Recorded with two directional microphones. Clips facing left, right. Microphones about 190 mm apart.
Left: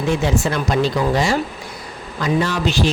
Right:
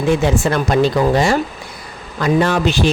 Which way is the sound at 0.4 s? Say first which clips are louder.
Right 4 dB; 55° right (ahead or behind).